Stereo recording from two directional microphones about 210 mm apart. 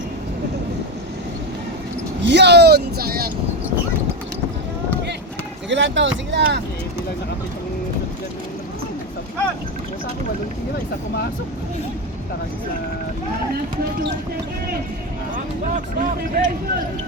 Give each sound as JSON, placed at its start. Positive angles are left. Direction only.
{"t": 2.2, "sound": "a sound", "side_deg": -55}
{"t": 5.6, "sound": "speech", "side_deg": -60}
{"t": 15.6, "sound": "speech", "side_deg": -40}